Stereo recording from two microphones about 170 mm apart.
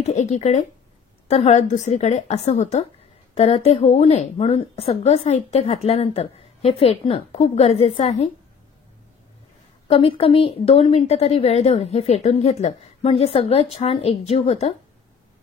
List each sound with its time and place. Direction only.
0.0 s a woman's voice: 40° left (ahead or behind)
9.8 s a woman's voice: 35° left (ahead or behind)